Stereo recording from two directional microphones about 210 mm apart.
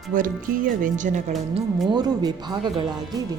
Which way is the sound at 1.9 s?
20° right (ahead or behind).